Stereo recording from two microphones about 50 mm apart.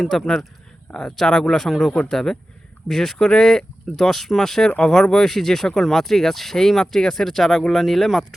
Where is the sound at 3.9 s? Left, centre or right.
Centre.